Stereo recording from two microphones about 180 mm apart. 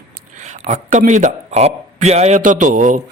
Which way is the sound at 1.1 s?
40° right (ahead or behind).